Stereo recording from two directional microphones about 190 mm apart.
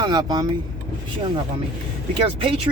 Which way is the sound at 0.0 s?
20° right (ahead or behind).